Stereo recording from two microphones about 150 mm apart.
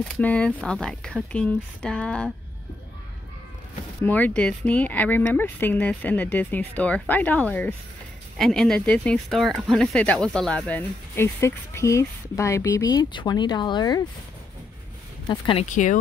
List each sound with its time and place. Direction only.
0.1 s speech: 10° left (ahead or behind)
4.0 s speech: 10° left (ahead or behind); by 14.0 s 25° left (ahead or behind)
15.2 s speech: 35° left (ahead or behind)
15.7 s speech: 55° left (ahead or behind)